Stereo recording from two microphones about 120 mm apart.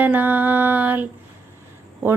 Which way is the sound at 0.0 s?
15° right (ahead or behind).